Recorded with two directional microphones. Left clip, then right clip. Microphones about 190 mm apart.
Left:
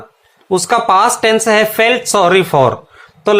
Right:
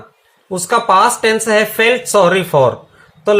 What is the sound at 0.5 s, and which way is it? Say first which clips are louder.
Speech: left 1 dB; 30° left (ahead or behind).